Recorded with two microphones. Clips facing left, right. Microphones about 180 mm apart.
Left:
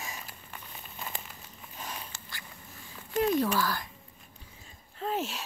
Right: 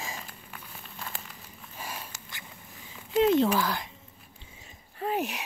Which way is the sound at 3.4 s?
20° right (ahead or behind).